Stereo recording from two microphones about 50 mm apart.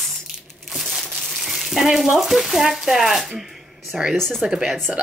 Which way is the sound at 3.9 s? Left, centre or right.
Right.